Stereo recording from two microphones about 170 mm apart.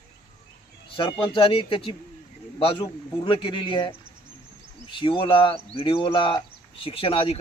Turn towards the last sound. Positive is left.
turn(degrees=35)  # may be behind; listen again after turning